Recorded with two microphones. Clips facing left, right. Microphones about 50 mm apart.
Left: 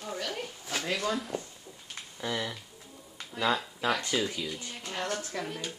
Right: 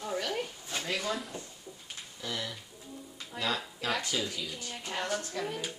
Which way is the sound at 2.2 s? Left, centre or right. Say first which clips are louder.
Left 4 dB; left.